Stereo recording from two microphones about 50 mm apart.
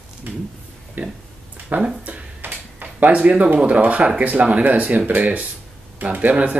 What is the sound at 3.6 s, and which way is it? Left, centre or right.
Speech, right.